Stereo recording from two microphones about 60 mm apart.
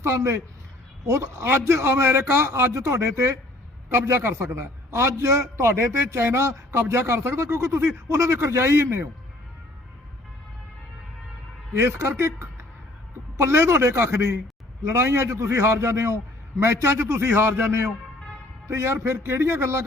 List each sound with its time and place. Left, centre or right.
0.0 s a man's voice: right
11.8 s speech: right
18.7 s speech: right